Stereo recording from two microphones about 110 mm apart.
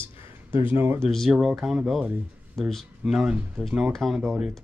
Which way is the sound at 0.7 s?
20° right (ahead or behind).